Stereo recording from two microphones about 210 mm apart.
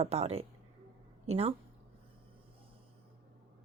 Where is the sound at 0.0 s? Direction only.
30° right (ahead or behind).